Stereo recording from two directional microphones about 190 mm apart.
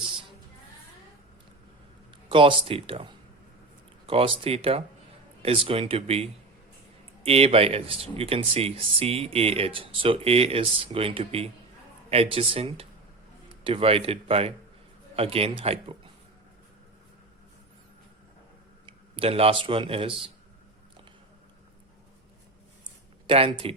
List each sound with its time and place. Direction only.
2.3 s a man's voice: 25° right (ahead or behind)
7.3 s a man's voice: 30° right (ahead or behind)
18.9 s speech: 30° right (ahead or behind)
23.2 s a man's voice: 30° right (ahead or behind)